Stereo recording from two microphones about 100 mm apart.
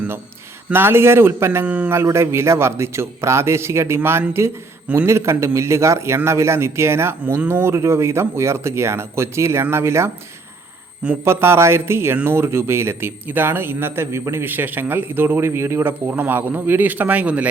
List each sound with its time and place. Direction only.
0.7 s speech: 25° right (ahead or behind)
1.6 s a man's voice: 15° right (ahead or behind)
2.0 s speech: 25° right (ahead or behind)
11.3 s speech: 25° right (ahead or behind)